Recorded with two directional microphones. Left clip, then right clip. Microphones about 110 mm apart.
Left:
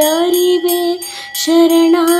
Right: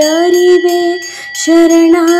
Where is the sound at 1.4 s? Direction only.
25° right (ahead or behind).